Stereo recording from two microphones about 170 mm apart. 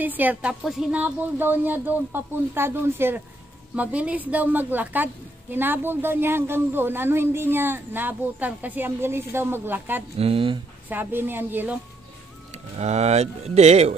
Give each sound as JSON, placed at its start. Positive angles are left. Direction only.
{"t": 0.0, "sound": "a woman's voice", "side_deg": -10}
{"t": 10.1, "sound": "speech", "side_deg": -35}
{"t": 10.9, "sound": "a woman's voice", "side_deg": -10}
{"t": 12.7, "sound": "speech", "side_deg": -40}